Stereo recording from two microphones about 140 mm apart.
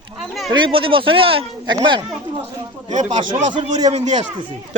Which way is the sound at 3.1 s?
40° right (ahead or behind).